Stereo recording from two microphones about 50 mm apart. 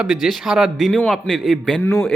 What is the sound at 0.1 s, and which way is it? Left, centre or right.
Speech, centre.